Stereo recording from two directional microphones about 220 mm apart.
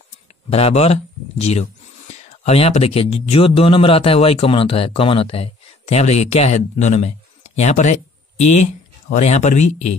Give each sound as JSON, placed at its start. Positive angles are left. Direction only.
{"t": 0.5, "sound": "speech", "side_deg": 25}